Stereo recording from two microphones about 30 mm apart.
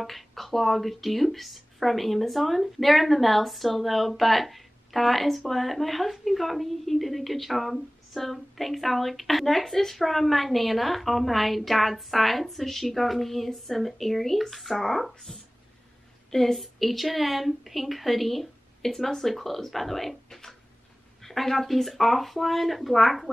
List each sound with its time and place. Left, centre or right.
0.0 s a woman's voice: centre
18.8 s a woman's voice: centre